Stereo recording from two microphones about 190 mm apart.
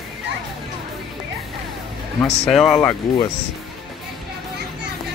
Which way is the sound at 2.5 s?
Centre (ahead or behind).